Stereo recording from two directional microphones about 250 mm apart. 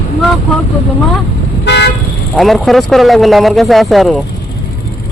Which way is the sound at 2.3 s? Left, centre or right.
Centre.